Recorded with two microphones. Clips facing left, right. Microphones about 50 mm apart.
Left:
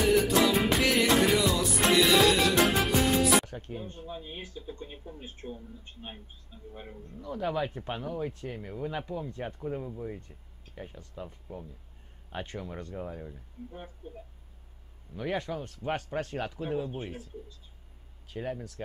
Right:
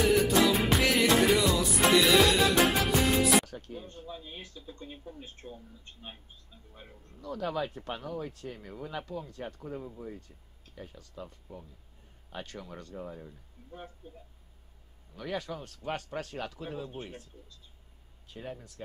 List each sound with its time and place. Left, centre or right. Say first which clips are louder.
0.0 s music: even; centre
3.4 s music: left 2 dB; left
3.8 s speech: left 3 dB; left
10.0 s speech: left 4 dB; left
13.7 s speech: right 1 dB; centre
15.1 s speech: left 4 dB; left
16.5 s speech: left 6 dB; centre
18.3 s speech: left 6 dB; left